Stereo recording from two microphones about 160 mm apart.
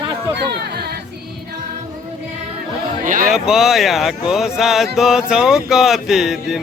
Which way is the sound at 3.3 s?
5° right (ahead or behind).